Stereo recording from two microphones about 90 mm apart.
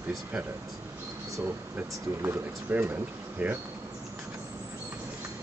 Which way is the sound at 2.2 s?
25° right (ahead or behind).